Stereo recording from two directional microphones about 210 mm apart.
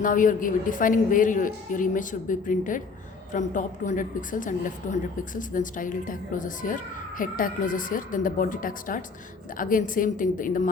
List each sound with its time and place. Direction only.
0.0 s a woman's voice: 40° left (ahead or behind)